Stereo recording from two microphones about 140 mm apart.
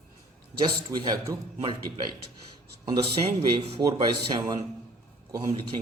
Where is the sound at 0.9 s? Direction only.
30° right (ahead or behind).